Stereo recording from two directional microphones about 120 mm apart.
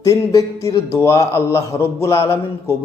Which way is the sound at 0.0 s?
30° left (ahead or behind).